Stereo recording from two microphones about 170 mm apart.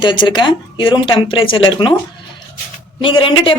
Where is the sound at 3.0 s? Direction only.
30° left (ahead or behind).